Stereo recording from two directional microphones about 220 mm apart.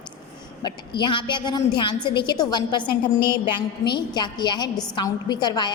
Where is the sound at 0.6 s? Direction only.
20° left (ahead or behind).